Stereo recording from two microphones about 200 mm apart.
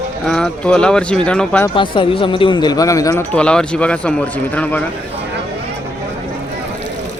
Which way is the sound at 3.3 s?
5° left (ahead or behind).